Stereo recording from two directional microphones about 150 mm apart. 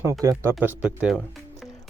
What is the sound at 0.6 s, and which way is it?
Speech, 5° right (ahead or behind).